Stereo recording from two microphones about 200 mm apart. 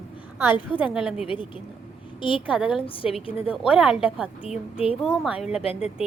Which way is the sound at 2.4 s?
5° right (ahead or behind).